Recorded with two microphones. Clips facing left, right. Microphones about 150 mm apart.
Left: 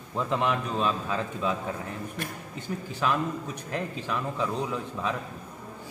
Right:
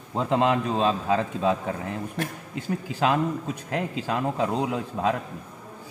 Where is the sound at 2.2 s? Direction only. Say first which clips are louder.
Right 5 dB; 90° right.